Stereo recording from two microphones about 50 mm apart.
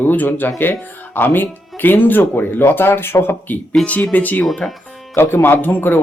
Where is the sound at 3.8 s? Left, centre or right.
Left.